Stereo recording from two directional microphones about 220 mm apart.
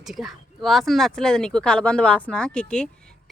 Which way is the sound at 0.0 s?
Centre (ahead or behind).